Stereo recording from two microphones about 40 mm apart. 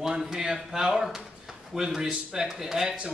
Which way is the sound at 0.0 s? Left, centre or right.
Centre.